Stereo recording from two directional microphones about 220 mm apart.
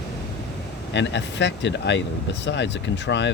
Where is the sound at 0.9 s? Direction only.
55° left (ahead or behind).